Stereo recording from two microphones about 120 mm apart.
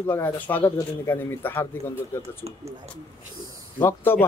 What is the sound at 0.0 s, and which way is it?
A man's voice, 15° left (ahead or behind).